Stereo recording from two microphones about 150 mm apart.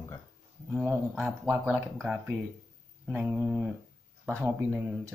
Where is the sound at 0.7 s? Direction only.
15° right (ahead or behind).